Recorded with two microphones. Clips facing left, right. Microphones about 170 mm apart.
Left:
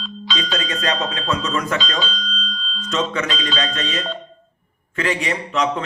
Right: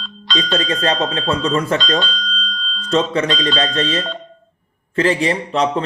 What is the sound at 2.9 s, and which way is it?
Speech, 30° right (ahead or behind).